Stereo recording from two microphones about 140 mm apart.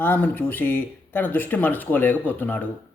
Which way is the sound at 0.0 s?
15° left (ahead or behind).